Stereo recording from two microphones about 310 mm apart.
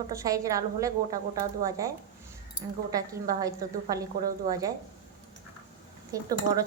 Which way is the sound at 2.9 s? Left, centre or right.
Centre.